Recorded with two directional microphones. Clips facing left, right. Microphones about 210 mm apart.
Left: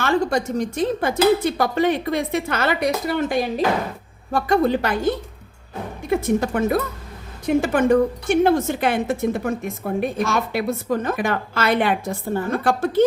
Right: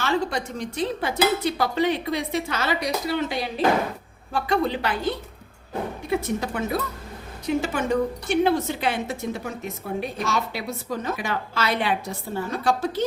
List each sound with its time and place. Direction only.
0.0 s a woman's voice: 45° left (ahead or behind)